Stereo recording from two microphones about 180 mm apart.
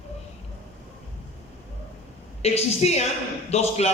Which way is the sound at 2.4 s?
35° left (ahead or behind).